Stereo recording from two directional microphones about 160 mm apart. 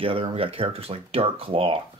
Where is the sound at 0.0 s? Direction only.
35° right (ahead or behind).